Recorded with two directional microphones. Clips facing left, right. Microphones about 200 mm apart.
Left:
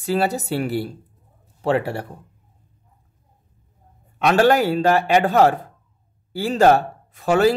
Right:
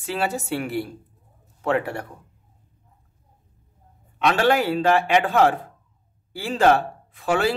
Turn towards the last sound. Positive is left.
turn(degrees=40)  # may be behind; listen again after turning